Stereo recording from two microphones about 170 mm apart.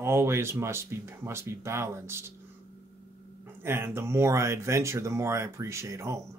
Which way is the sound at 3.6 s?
15° right (ahead or behind).